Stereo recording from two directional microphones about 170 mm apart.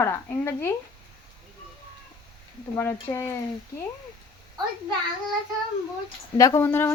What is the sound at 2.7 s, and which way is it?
Speech, 15° left (ahead or behind).